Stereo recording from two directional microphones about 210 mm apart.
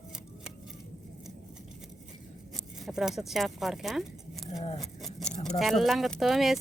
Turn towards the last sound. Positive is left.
turn(degrees=0)  # may be behind; listen again after turning